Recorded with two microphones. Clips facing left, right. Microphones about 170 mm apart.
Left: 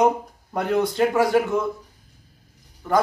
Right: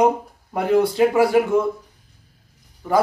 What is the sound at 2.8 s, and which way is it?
Speech, 10° right (ahead or behind).